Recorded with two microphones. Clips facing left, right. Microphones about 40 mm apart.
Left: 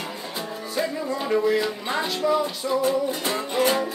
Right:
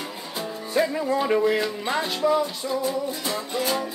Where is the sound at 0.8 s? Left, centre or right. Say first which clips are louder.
Right 4 dB; centre.